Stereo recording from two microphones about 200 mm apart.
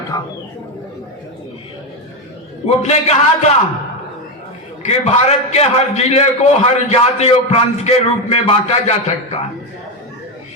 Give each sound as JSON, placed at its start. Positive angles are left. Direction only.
{"t": 0.1, "sound": "speech", "side_deg": 15}
{"t": 2.6, "sound": "a man's voice", "side_deg": 35}
{"t": 4.9, "sound": "a man's voice", "side_deg": 35}